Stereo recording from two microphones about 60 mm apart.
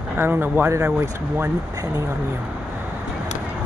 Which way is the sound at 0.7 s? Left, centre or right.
Right.